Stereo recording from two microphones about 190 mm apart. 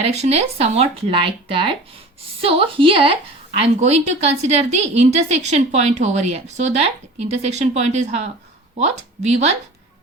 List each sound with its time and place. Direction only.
0.0 s a woman's voice: 35° right (ahead or behind)